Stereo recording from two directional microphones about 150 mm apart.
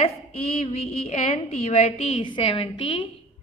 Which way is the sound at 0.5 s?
45° left (ahead or behind).